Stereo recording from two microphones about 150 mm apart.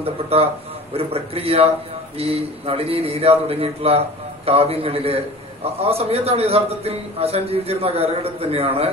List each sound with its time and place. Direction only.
0.0 s a man's voice: 40° right (ahead or behind)